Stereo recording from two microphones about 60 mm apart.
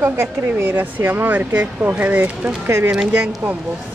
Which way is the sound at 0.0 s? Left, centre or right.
Right.